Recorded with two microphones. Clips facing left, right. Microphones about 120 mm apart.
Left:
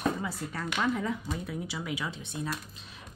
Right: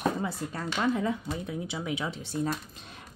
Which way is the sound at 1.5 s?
25° right (ahead or behind).